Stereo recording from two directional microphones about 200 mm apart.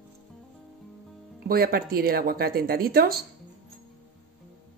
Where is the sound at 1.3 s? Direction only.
50° right (ahead or behind).